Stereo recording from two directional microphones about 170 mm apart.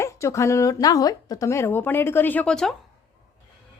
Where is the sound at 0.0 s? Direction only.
15° left (ahead or behind).